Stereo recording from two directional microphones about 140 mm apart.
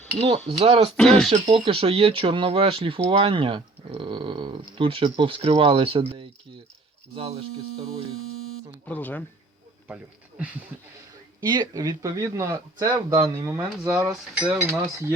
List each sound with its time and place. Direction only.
0.2 s speech: 40° right (ahead or behind)
0.9 s speech: 5° left (ahead or behind)
1.3 s speech: 35° right (ahead or behind)
8.9 s speech: 10° left (ahead or behind)
9.9 s speech: 10° right (ahead or behind)
11.3 s speech: 30° right (ahead or behind)
14.3 s speech: 5° right (ahead or behind)